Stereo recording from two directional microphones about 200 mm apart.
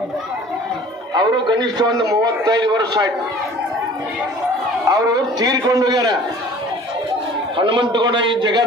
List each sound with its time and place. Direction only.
1.1 s a man's voice: 20° right (ahead or behind)
4.9 s a man's voice: 15° right (ahead or behind)
7.5 s a man's voice: 25° right (ahead or behind)